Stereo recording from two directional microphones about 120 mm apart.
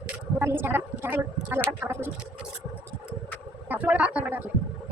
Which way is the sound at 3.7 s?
10° right (ahead or behind).